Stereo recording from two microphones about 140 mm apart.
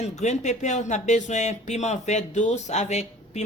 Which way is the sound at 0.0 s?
55° left (ahead or behind).